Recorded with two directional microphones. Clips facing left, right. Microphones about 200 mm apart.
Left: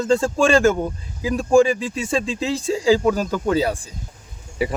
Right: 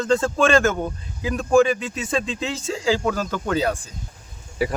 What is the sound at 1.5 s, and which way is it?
Speech, 30° left (ahead or behind).